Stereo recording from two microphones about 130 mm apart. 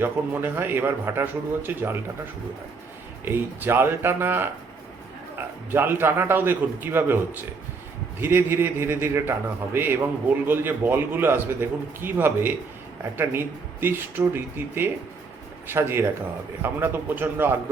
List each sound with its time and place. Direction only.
0.0 s a man's voice: 15° right (ahead or behind)
3.2 s a man's voice: 15° right (ahead or behind)
5.7 s a man's voice: 15° right (ahead or behind)
8.2 s a man's voice: 15° right (ahead or behind)
13.8 s a man's voice: 15° right (ahead or behind)